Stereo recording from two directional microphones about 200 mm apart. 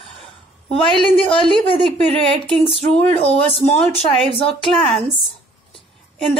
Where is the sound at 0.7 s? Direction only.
Centre (ahead or behind).